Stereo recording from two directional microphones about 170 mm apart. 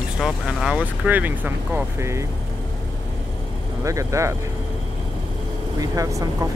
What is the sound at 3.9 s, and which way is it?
Speech, 20° right (ahead or behind).